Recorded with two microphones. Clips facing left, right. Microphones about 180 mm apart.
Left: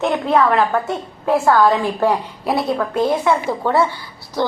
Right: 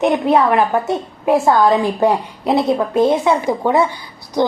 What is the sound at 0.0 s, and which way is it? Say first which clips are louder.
A woman's voice: right 2 dB; 20° right (ahead or behind).